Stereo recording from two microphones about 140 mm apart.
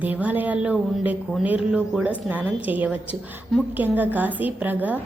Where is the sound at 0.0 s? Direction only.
10° right (ahead or behind).